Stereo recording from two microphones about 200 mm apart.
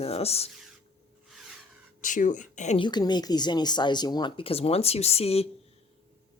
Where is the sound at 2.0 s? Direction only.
40° left (ahead or behind).